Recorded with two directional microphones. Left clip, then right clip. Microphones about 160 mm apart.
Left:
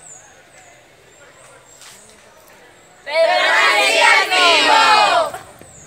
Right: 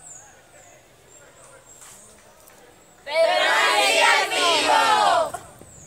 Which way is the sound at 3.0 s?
15° right (ahead or behind).